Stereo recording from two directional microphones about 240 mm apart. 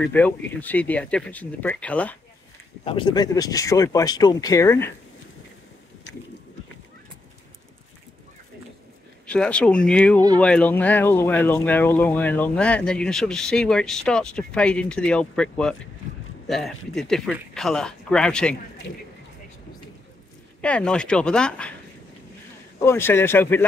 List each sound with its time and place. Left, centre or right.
0.0 s speech: centre
2.8 s speech: left
9.2 s speech: centre
20.6 s speech: centre
22.8 s speech: centre